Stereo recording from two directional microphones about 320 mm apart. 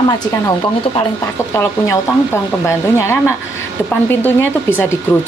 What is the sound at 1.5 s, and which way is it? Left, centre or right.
Speech, centre.